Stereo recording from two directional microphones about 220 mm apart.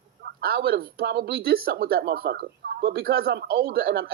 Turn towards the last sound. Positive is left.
turn(degrees=-45)  # may be behind; listen again after turning